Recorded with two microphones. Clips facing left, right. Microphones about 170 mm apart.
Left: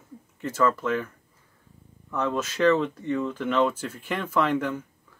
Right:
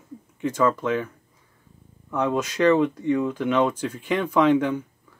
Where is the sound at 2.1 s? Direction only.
15° right (ahead or behind).